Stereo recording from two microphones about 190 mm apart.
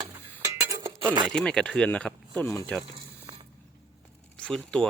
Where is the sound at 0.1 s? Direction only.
15° right (ahead or behind).